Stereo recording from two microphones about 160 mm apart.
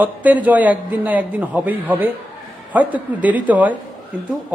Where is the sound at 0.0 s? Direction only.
10° right (ahead or behind).